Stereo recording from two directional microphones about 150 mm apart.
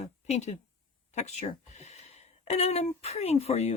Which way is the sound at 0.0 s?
50° left (ahead or behind).